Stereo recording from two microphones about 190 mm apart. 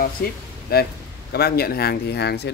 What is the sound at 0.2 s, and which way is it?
Speech, 55° left (ahead or behind).